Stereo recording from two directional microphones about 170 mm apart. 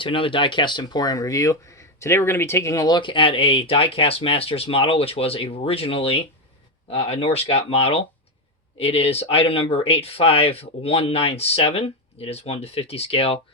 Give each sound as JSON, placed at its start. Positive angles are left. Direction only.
{"t": 0.0, "sound": "speech", "side_deg": 30}